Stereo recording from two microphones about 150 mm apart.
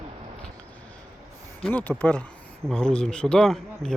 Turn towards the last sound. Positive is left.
turn(degrees=5)  # may be behind; listen again after turning